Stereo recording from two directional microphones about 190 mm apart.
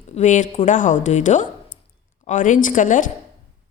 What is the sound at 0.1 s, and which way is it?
A woman's voice, 40° left (ahead or behind).